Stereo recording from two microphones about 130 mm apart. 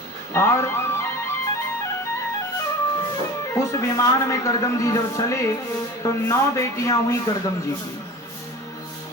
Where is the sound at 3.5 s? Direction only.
20° left (ahead or behind).